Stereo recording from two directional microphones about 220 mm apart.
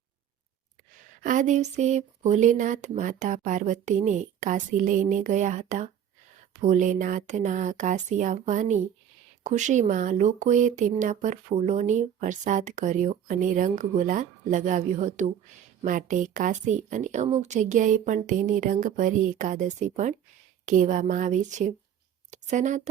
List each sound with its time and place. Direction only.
1.2 s a woman's voice: 35° right (ahead or behind)